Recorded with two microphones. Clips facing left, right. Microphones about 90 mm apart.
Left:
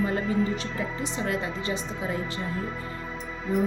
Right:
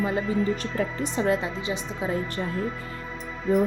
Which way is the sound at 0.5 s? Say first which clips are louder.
Right 3 dB; 50° right (ahead or behind).